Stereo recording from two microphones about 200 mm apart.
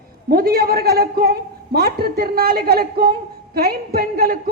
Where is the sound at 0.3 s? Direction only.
50° right (ahead or behind).